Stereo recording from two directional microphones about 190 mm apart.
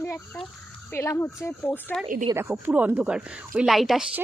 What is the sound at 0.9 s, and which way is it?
Speech, 15° left (ahead or behind).